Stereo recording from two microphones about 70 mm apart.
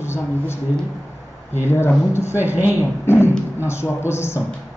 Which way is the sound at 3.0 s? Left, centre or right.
Left.